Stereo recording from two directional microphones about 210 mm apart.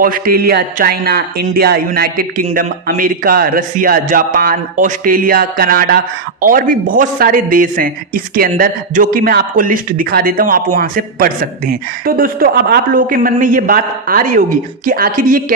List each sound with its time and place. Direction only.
0.0 s speech: 45° right (ahead or behind)